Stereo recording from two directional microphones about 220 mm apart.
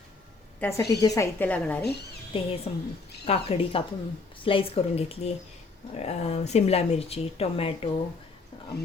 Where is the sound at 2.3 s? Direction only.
25° left (ahead or behind).